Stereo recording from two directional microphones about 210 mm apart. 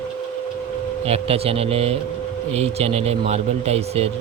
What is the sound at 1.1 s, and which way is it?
A man's voice, 30° right (ahead or behind).